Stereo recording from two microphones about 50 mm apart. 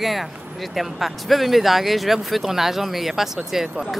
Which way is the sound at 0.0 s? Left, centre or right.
Centre.